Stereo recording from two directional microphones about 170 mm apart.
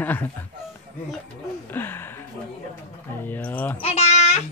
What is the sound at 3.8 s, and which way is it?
Babbling, 40° left (ahead or behind).